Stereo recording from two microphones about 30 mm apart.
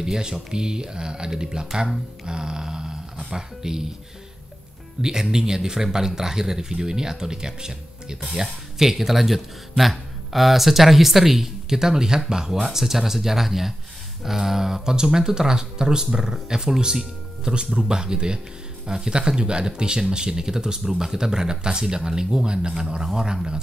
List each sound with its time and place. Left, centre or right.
0.0 s speech: right
2.2 s mantra: right
3.3 s speech: centre
5.0 s speech: centre
8.7 s speech: centre
11.8 s speech: right